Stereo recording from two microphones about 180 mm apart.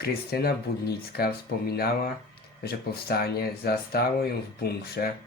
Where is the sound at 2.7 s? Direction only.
60° left (ahead or behind).